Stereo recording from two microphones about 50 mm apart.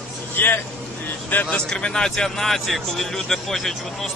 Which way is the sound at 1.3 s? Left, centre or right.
Left.